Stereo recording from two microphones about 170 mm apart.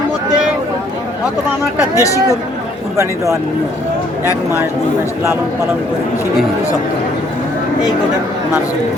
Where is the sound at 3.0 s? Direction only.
15° right (ahead or behind).